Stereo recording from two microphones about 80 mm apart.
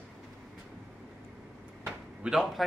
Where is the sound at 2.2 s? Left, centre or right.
Centre.